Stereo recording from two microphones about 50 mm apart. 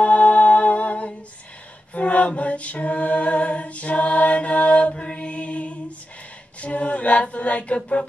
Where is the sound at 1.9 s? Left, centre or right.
Left.